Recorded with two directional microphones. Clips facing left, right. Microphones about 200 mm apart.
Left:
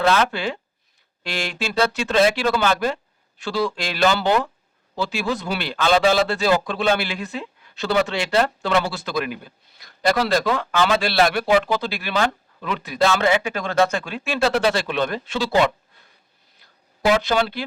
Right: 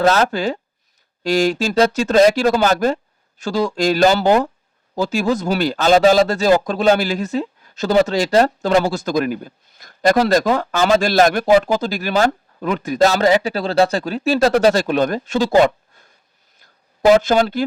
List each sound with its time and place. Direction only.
0.0 s speech: 40° right (ahead or behind)
17.1 s speech: 45° right (ahead or behind)